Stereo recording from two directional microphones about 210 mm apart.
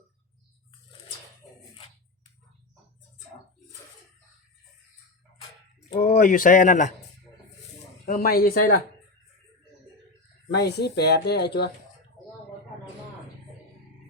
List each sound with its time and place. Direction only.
6.0 s speech: 40° left (ahead or behind)
8.0 s speech: 45° left (ahead or behind)
10.5 s speech: 50° left (ahead or behind)